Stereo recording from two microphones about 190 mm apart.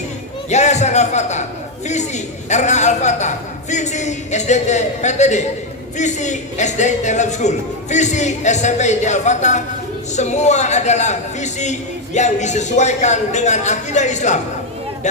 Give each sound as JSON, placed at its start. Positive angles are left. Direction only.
{"t": 0.5, "sound": "a man's voice", "side_deg": 35}